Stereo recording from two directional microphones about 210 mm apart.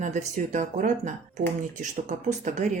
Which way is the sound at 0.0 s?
35° right (ahead or behind).